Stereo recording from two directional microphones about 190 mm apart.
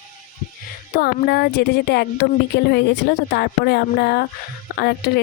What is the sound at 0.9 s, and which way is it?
Speech, 55° left (ahead or behind).